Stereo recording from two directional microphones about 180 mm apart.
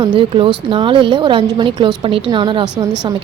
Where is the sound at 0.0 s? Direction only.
30° right (ahead or behind).